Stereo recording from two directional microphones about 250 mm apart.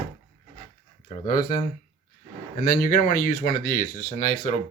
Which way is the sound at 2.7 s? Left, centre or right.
Left.